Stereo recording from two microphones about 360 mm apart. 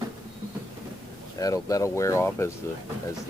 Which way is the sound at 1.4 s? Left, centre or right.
Centre.